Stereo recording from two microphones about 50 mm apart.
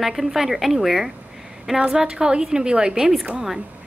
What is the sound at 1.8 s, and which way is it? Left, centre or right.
A woman's voice, centre.